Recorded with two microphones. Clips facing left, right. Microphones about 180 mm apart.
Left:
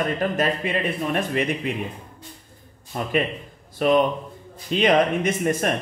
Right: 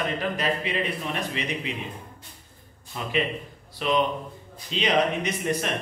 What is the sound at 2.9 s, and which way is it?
A man's voice, 50° left (ahead or behind).